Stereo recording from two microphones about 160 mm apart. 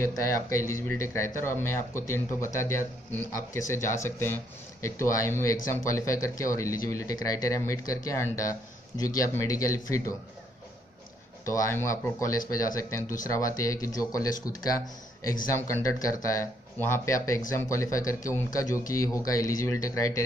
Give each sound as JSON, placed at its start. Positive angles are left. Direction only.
{"t": 0.0, "sound": "speech", "side_deg": 20}
{"t": 11.4, "sound": "speech", "side_deg": 20}